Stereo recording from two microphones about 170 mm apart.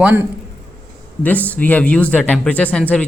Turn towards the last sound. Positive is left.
turn(degrees=10)  # may be behind; listen again after turning